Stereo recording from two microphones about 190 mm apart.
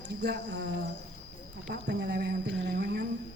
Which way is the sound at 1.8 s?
65° right (ahead or behind).